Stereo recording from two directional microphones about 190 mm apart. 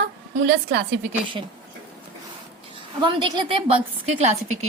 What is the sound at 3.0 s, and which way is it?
A woman's voice, 25° right (ahead or behind).